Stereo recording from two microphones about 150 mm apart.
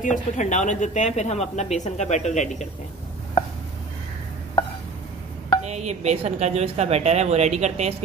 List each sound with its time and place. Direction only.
0.0 s speech: 60° left (ahead or behind)
5.6 s a woman's voice: 50° right (ahead or behind)